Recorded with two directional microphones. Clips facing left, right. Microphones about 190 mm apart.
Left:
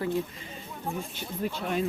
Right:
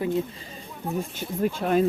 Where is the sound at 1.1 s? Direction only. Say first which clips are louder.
Right 6 dB; 45° right (ahead or behind).